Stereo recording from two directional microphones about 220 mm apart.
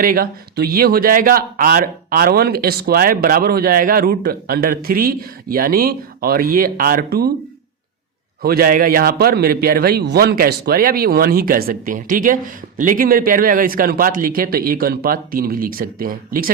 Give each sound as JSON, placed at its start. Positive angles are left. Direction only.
{"t": 0.0, "sound": "a man's voice", "side_deg": -40}
{"t": 8.4, "sound": "a man's voice", "side_deg": -40}